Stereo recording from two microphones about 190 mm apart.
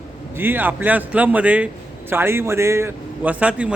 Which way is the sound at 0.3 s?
10° right (ahead or behind).